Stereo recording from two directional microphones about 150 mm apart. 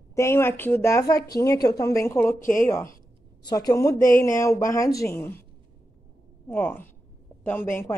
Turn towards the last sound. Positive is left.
turn(degrees=15)  # may be behind; listen again after turning